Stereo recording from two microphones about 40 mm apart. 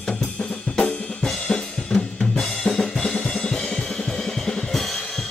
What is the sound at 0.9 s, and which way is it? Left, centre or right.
Drum, left.